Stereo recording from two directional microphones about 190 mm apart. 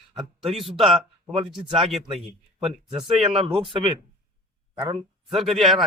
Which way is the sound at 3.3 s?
30° right (ahead or behind).